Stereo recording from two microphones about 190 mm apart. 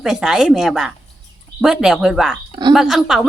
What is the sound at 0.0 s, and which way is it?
Speech, 5° right (ahead or behind).